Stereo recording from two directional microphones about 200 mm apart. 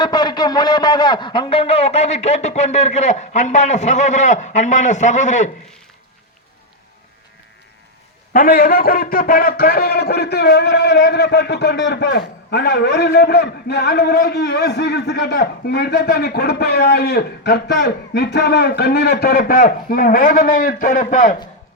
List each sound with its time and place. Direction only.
0.0 s a man's voice: 20° left (ahead or behind); by 5.5 s 35° left (ahead or behind)
8.3 s a man's voice: 45° left (ahead or behind)